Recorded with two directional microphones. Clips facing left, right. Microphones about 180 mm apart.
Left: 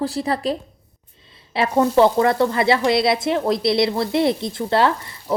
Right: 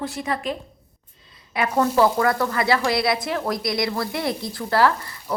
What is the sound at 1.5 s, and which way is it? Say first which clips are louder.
Speech: left 4 dB; 25° left (ahead or behind).